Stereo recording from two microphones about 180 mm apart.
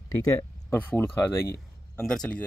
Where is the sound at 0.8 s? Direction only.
10° left (ahead or behind).